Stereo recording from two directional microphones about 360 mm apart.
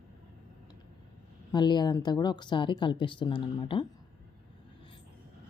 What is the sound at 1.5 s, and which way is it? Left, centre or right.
Speech, centre.